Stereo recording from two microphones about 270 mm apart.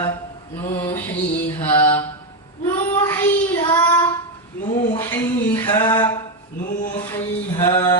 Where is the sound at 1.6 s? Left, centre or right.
Centre.